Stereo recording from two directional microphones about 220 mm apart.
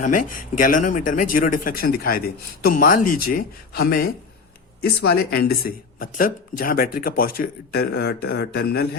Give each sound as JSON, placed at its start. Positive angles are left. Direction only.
{"t": 0.0, "sound": "speech", "side_deg": 35}